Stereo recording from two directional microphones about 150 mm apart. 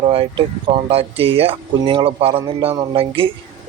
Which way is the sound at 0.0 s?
40° right (ahead or behind).